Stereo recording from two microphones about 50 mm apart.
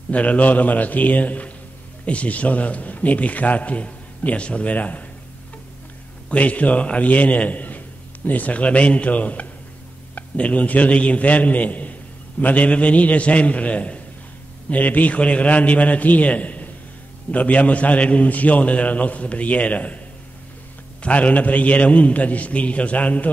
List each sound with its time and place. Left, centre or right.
0.1 s a man's voice: left
6.3 s a man's voice: left
21.0 s a man's voice: left